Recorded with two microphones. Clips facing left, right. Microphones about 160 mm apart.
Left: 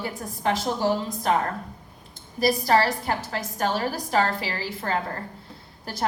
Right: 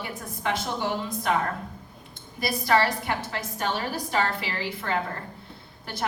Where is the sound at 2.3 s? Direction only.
40° left (ahead or behind).